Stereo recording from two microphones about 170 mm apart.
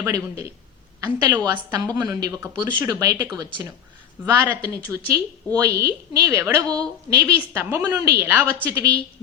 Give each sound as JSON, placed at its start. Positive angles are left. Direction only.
{"t": 0.0, "sound": "a woman's voice", "side_deg": -20}